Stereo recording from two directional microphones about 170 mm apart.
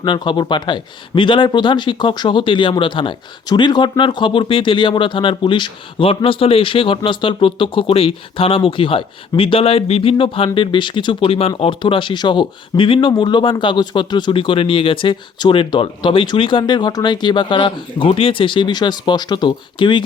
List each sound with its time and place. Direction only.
0.0 s speech: 25° left (ahead or behind)